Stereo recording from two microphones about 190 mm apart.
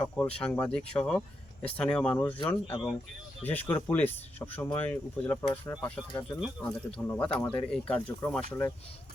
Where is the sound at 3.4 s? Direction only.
10° left (ahead or behind).